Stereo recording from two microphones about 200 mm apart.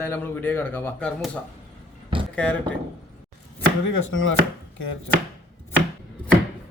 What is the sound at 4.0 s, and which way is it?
Speech, 75° left (ahead or behind).